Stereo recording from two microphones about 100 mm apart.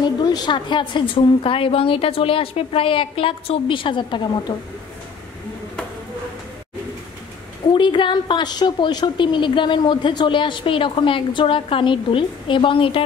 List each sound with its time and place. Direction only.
0.0 s a woman's voice: 45° left (ahead or behind)
7.7 s a woman's voice: 50° left (ahead or behind)